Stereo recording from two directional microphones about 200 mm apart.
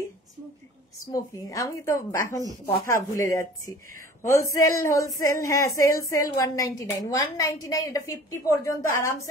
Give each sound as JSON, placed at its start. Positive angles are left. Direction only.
{"t": 1.0, "sound": "a woman's voice", "side_deg": 15}